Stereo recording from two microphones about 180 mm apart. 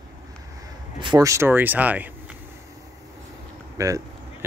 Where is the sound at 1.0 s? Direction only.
20° right (ahead or behind).